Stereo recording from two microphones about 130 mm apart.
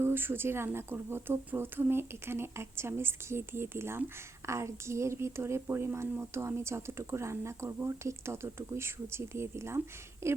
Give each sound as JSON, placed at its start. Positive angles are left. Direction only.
{"t": 0.0, "sound": "speech", "side_deg": -15}